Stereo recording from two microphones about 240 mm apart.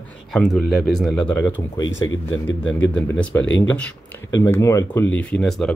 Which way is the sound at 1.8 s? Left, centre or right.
Left.